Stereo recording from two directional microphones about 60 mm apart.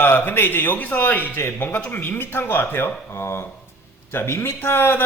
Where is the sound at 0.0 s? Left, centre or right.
Left.